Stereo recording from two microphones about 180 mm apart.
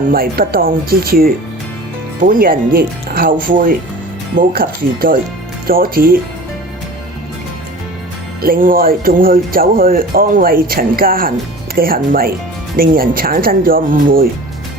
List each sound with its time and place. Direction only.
0.1 s speech: 55° right (ahead or behind)
8.4 s speech: 50° right (ahead or behind)